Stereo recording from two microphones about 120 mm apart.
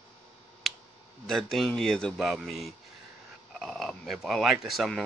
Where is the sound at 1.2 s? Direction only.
5° left (ahead or behind).